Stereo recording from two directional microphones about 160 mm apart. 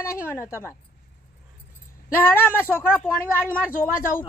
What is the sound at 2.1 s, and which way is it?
A man's voice, 10° left (ahead or behind).